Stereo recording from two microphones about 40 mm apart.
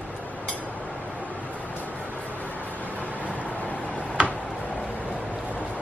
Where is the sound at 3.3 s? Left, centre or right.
Left.